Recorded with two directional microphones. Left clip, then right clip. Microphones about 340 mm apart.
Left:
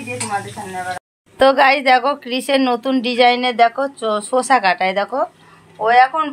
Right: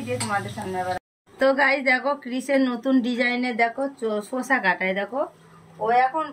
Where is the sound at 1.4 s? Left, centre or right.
Centre.